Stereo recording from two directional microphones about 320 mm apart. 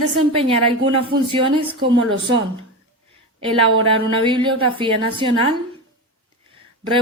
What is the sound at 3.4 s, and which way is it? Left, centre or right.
A woman's voice, centre.